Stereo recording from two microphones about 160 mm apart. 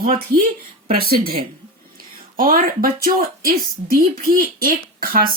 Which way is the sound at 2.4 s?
60° right (ahead or behind).